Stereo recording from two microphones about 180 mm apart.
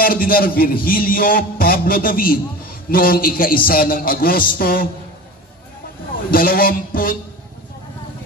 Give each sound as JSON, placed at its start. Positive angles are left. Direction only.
{"t": 0.0, "sound": "a man's voice", "side_deg": 55}
{"t": 6.3, "sound": "a man's voice", "side_deg": 55}